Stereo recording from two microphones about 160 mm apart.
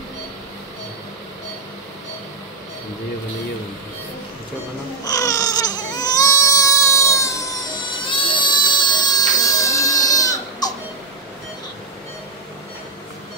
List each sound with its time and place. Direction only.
5.0 s baby cry: 20° left (ahead or behind)
8.0 s baby cry: 30° left (ahead or behind)